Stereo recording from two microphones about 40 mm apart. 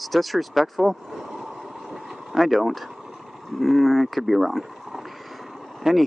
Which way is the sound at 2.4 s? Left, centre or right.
Centre.